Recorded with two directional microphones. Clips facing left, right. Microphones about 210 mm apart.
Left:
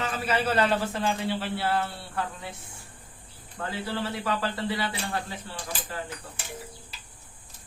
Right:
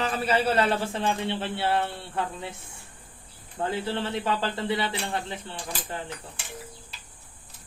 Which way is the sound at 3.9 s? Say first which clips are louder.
Right 2 dB; 25° right (ahead or behind).